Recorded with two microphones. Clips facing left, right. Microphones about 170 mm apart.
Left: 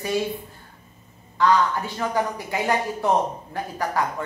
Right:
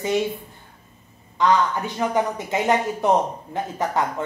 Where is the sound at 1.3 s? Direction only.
20° right (ahead or behind).